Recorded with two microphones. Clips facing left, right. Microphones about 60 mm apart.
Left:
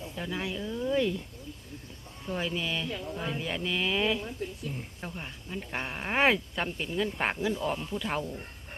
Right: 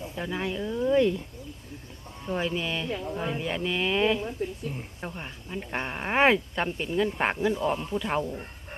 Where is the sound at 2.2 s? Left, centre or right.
Centre.